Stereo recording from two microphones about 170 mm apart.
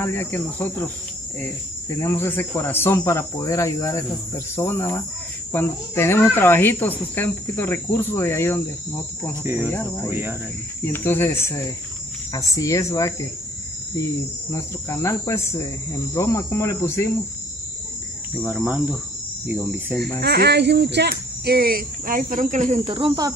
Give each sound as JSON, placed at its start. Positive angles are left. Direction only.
{"t": 0.0, "sound": "speech", "side_deg": 15}
{"t": 2.0, "sound": "speech", "side_deg": 15}
{"t": 9.3, "sound": "cricket", "side_deg": -15}
{"t": 9.7, "sound": "speech", "side_deg": 15}
{"t": 10.0, "sound": "cricket", "side_deg": -10}
{"t": 10.8, "sound": "speech", "side_deg": 10}
{"t": 14.5, "sound": "speech", "side_deg": 15}
{"t": 18.3, "sound": "cricket", "side_deg": -5}
{"t": 20.2, "sound": "speech", "side_deg": -75}
{"t": 22.8, "sound": "cricket", "side_deg": -30}